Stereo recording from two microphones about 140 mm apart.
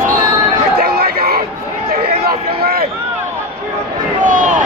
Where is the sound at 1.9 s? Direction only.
90° right.